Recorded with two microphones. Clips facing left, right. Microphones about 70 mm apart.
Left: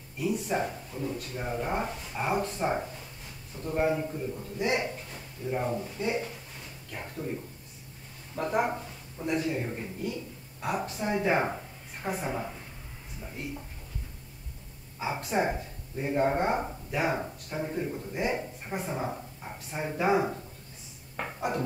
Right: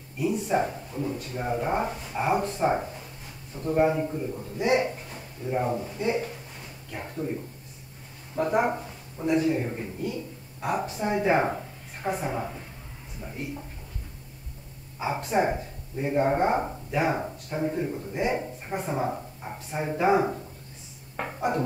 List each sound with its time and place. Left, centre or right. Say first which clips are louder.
0.2 s speech: right 4 dB; centre
8.4 s a woman's voice: right 4 dB; centre
12.4 s speech: right 3 dB; centre
15.0 s speech: right 4 dB; centre
18.9 s speech: right 5 dB; centre
21.2 s a sound: right 3 dB; centre